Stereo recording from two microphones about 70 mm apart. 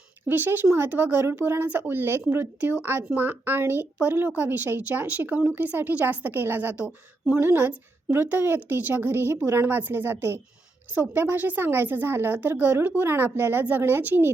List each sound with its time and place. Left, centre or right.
0.3 s a woman's voice: right
7.3 s a woman's voice: right